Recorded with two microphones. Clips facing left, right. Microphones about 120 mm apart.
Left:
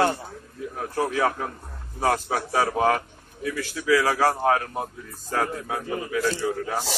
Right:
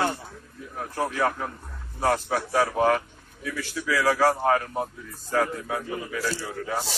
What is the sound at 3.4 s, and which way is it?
A man's voice, 60° left (ahead or behind).